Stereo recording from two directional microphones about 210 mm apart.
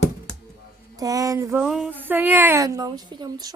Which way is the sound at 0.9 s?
15° right (ahead or behind).